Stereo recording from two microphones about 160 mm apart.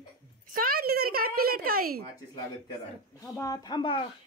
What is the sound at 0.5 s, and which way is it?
A woman's voice, 65° right (ahead or behind).